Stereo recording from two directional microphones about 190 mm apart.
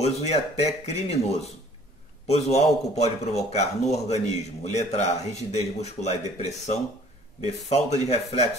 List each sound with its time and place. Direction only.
0.0 s speech: 35° left (ahead or behind)